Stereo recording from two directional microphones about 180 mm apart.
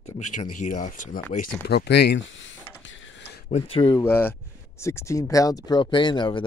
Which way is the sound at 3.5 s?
30° left (ahead or behind).